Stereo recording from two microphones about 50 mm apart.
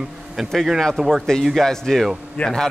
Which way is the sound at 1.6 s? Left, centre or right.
Centre.